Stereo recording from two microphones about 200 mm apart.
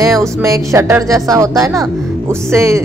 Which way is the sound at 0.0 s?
15° right (ahead or behind).